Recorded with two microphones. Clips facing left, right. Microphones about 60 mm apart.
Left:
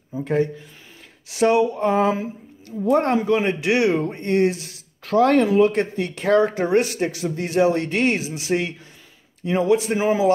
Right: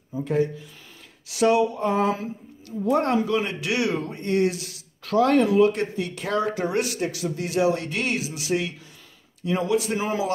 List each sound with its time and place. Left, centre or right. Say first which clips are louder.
0.2 s speech: left 2 dB; left
1.3 s speech: left 2 dB; left
9.9 s a man's voice: left 6 dB; centre